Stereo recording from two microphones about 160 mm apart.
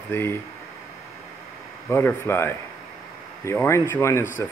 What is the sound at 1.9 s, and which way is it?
Speech, 15° left (ahead or behind).